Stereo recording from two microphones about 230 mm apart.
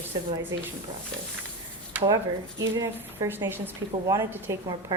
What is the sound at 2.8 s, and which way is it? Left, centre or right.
A woman's voice, centre.